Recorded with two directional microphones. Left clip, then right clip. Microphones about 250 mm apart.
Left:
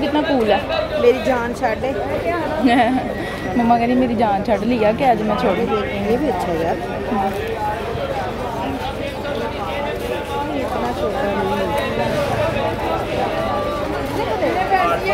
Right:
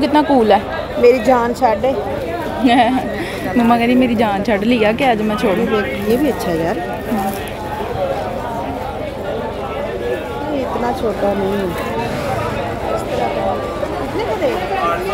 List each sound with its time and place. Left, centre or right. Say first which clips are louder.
0.0 s a woman's voice: right 5 dB; centre
1.0 s a woman's voice: right 6 dB; right
2.6 s a woman's voice: right 4 dB; centre